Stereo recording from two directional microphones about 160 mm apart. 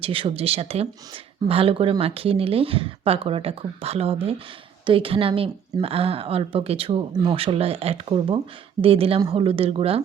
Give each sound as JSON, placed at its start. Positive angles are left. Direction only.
{"t": 0.0, "sound": "a woman's voice", "side_deg": -35}